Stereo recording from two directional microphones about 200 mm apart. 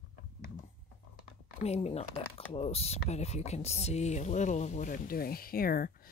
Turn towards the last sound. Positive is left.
turn(degrees=45)  # may be behind; listen again after turning